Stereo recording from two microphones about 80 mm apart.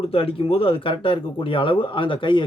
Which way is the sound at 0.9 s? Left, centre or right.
Left.